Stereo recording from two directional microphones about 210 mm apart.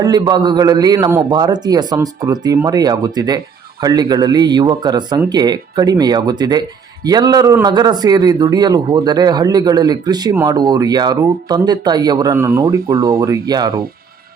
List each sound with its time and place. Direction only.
0.0 s a man's voice: 20° right (ahead or behind)